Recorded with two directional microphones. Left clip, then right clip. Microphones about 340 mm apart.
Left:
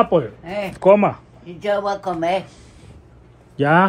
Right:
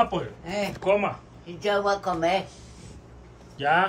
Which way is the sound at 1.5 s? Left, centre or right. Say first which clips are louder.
Left 3 dB; left.